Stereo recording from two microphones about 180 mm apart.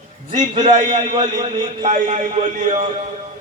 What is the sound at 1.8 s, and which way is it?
Speech, 40° right (ahead or behind).